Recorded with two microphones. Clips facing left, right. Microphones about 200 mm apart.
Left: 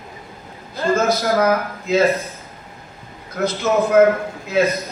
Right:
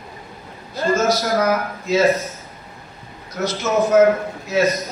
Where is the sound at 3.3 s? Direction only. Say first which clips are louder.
Left 1 dB; 55° left (ahead or behind).